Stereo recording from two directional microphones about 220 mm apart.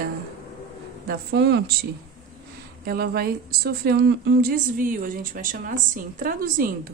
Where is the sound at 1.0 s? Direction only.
45° right (ahead or behind).